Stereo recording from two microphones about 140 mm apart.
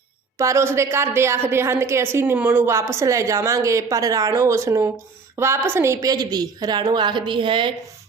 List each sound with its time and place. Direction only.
0.3 s a woman's voice: 20° right (ahead or behind)